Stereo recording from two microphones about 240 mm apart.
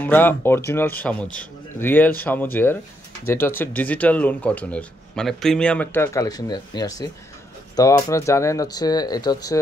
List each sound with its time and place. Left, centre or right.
0.0 s speech: centre